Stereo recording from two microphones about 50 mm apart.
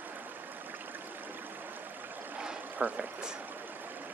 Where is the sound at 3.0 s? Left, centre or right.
Centre.